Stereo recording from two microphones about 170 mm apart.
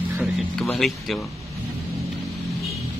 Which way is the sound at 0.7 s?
Centre (ahead or behind).